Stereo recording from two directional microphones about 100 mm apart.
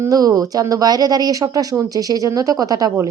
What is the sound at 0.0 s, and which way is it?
A woman's voice, 35° right (ahead or behind).